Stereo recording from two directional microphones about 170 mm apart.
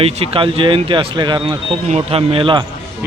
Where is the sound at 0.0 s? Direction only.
35° right (ahead or behind).